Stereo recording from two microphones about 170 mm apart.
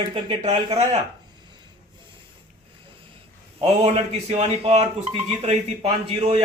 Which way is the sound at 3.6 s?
40° right (ahead or behind).